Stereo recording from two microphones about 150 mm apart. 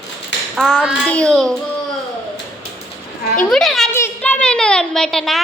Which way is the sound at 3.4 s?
5° left (ahead or behind).